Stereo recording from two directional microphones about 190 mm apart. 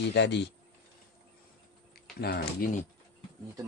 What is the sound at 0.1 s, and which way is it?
Speech, 65° left (ahead or behind).